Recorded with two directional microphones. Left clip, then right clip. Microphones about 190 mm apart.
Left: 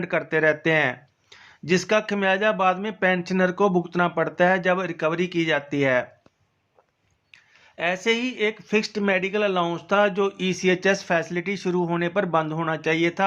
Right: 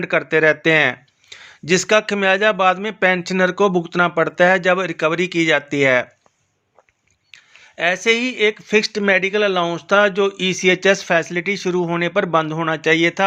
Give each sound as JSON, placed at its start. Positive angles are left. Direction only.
{"t": 0.0, "sound": "speech", "side_deg": -20}
{"t": 7.3, "sound": "speech", "side_deg": -25}